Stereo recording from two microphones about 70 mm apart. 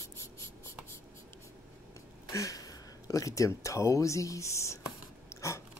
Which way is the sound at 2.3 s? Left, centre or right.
Left.